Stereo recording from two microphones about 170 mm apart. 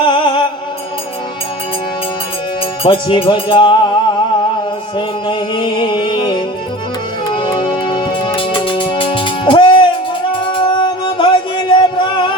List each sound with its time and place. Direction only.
0.0 s music: 30° left (ahead or behind)
2.8 s speech: 30° left (ahead or behind)
4.9 s music: 30° left (ahead or behind)